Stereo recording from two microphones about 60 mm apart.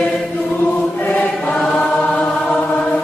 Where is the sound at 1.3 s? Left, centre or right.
Centre.